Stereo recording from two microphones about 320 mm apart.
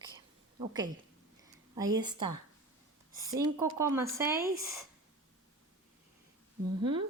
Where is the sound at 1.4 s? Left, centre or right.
Centre.